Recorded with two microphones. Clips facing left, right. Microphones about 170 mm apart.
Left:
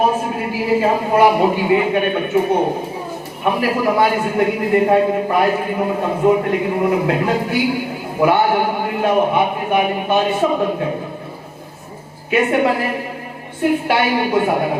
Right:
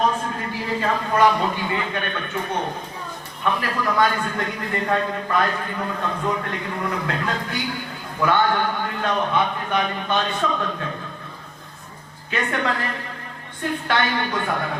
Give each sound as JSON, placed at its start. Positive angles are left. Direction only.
{"t": 0.0, "sound": "a man's voice", "side_deg": 10}
{"t": 7.1, "sound": "a man's voice", "side_deg": 10}
{"t": 12.3, "sound": "a man's voice", "side_deg": 10}